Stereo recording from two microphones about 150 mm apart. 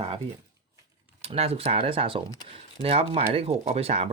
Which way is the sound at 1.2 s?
45° right (ahead or behind).